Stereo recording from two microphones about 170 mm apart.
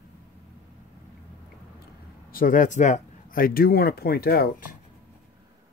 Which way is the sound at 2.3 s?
55° left (ahead or behind).